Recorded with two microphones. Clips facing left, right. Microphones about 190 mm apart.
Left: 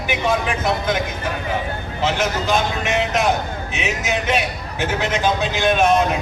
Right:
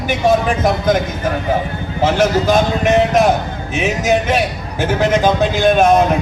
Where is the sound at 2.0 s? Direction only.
45° right (ahead or behind).